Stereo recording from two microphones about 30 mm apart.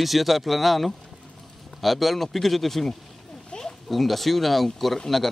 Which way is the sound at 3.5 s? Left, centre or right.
Left.